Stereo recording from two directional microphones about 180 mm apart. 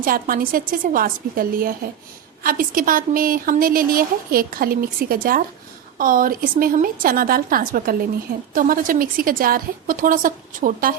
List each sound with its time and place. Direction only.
0.0 s a woman's voice: 50° right (ahead or behind)